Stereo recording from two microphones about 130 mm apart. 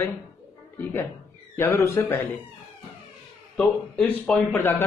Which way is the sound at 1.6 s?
20° left (ahead or behind).